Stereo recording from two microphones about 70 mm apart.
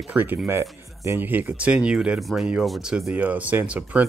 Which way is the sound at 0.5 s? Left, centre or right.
Right.